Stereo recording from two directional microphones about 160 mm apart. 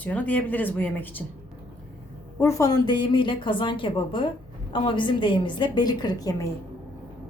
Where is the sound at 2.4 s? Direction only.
20° left (ahead or behind).